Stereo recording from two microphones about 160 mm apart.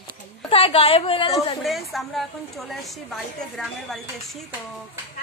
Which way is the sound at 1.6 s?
Centre (ahead or behind).